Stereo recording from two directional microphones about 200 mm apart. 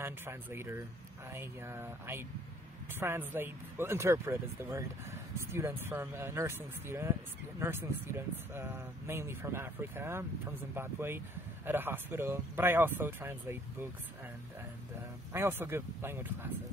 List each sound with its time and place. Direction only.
0.0 s speech: 10° right (ahead or behind)
15.3 s speech: 10° right (ahead or behind)